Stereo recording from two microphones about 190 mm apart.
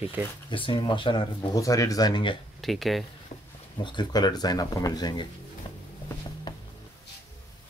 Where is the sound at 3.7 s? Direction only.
25° left (ahead or behind).